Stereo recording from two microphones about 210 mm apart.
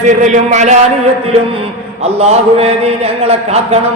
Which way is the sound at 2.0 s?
30° right (ahead or behind).